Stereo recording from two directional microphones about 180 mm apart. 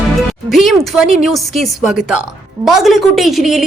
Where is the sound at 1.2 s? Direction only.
Centre (ahead or behind).